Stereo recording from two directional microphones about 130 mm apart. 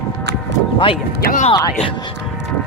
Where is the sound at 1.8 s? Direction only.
40° left (ahead or behind).